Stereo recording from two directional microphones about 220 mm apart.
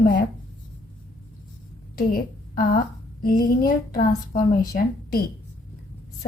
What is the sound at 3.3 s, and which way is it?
Speech, 40° left (ahead or behind).